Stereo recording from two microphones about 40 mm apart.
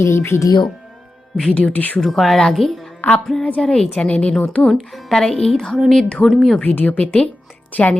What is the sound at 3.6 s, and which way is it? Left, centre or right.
Speech, centre.